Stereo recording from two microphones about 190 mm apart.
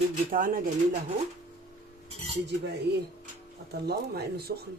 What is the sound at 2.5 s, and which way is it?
Speech, 60° right (ahead or behind).